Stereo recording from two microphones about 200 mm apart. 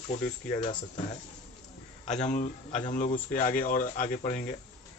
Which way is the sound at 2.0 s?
35° left (ahead or behind).